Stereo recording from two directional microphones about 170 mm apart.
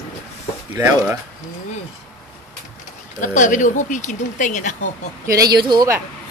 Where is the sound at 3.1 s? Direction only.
50° left (ahead or behind).